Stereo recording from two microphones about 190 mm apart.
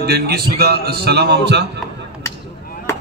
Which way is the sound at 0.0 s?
55° right (ahead or behind).